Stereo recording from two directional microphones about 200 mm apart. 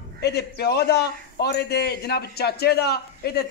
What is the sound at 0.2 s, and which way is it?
A man's voice, 55° left (ahead or behind).